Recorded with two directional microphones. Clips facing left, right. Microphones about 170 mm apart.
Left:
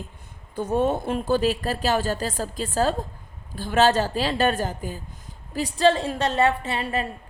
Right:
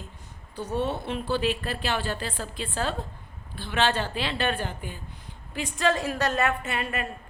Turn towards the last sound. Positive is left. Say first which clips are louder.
# left 4 dB
turn(degrees=30)  # may be behind; listen again after turning